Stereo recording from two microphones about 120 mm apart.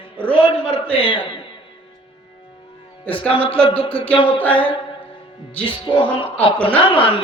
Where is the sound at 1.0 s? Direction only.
45° left (ahead or behind).